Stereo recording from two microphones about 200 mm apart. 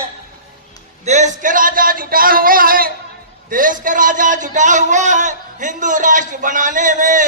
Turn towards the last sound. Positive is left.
turn(degrees=-40)  # may be behind; listen again after turning